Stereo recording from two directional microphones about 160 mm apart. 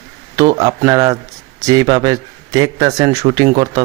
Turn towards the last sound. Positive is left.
turn(degrees=-25)  # may be behind; listen again after turning